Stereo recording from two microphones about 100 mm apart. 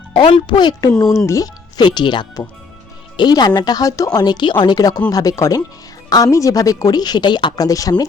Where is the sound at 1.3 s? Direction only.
35° left (ahead or behind).